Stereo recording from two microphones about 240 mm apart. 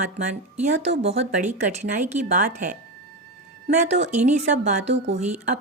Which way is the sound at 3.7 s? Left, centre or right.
Right.